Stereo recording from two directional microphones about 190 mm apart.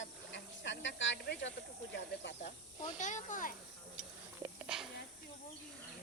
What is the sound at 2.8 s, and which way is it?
Speech, 40° left (ahead or behind).